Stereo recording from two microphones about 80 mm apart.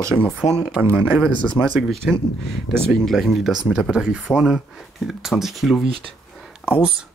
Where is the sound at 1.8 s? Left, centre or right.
Centre.